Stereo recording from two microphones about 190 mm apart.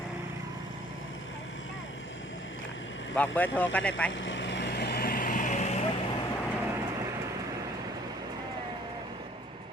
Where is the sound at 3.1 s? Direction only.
10° left (ahead or behind).